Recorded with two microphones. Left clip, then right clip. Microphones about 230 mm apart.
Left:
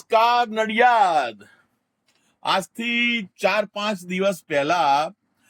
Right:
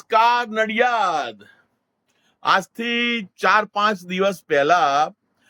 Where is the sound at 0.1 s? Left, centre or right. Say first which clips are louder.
Right 1 dB; centre.